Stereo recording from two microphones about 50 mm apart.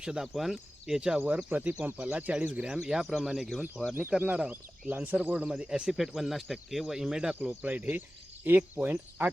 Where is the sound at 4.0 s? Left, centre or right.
Right.